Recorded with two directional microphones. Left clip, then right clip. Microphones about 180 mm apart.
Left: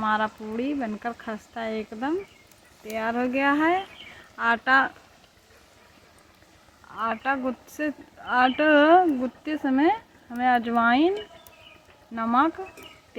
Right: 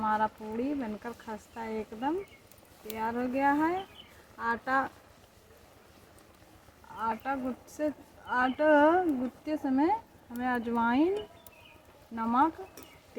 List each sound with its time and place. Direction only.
0.0 s speech: 40° left (ahead or behind)
6.9 s speech: 50° left (ahead or behind)
12.1 s speech: 45° left (ahead or behind)